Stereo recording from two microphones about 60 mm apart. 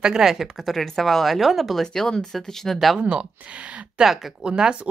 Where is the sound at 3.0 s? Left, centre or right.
Centre.